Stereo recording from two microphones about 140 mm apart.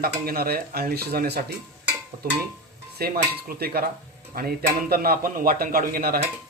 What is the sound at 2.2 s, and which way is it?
Stir, 90° right.